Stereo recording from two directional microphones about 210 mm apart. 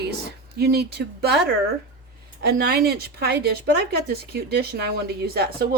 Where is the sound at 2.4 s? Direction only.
50° right (ahead or behind).